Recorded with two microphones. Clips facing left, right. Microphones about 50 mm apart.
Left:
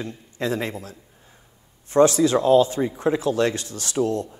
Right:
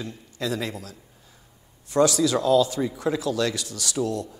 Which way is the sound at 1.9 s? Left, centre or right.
Left.